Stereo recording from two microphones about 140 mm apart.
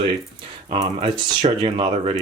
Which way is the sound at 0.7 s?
35° right (ahead or behind).